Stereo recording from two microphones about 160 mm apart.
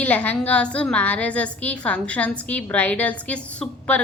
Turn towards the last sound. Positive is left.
turn(degrees=5)  # may be behind; listen again after turning